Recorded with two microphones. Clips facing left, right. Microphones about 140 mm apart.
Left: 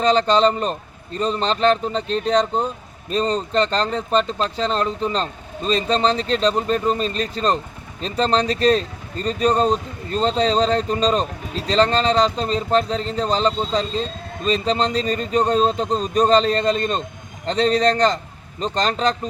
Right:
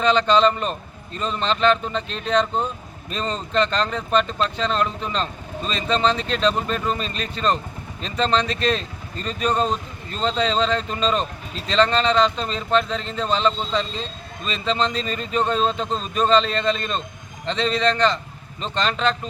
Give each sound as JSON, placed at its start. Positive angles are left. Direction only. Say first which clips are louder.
{"t": 0.0, "sound": "speech", "louder": "left 1 dB", "side_deg": 35}